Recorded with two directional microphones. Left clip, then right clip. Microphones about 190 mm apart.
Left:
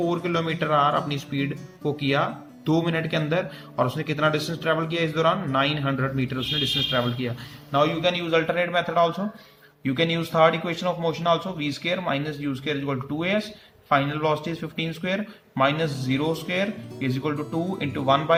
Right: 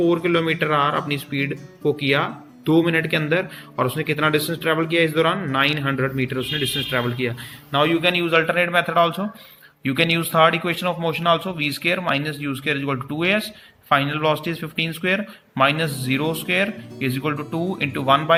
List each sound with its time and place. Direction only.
0.0 s a man's voice: centre (ahead or behind)